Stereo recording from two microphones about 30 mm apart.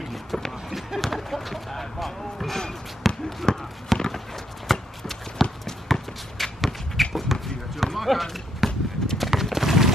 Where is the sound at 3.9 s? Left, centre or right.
Centre.